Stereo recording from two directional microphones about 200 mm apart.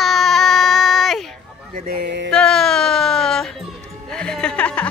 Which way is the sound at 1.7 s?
50° right (ahead or behind).